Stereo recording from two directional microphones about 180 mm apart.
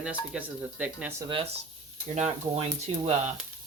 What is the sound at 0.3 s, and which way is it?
Speech, 10° right (ahead or behind).